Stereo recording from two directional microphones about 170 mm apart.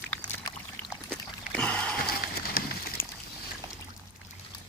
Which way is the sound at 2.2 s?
60° left (ahead or behind).